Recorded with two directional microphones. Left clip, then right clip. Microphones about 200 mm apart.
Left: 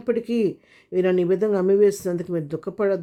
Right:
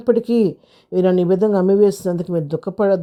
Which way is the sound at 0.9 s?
20° right (ahead or behind).